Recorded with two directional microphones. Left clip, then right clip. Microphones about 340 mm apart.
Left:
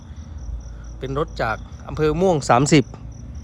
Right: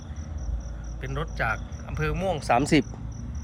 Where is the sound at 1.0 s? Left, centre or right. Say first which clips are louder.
Left 6 dB; centre.